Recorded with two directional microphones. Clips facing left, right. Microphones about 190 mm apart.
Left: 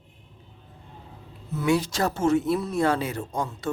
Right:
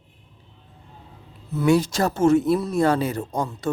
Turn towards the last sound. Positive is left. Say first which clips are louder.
# right 3 dB
turn(degrees=-40)  # may be behind; listen again after turning